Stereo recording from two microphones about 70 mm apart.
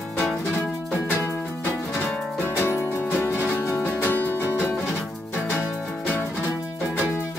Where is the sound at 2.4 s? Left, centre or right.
Left.